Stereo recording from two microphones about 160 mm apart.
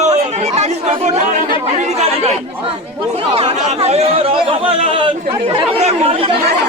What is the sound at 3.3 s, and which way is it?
Speech, 40° right (ahead or behind).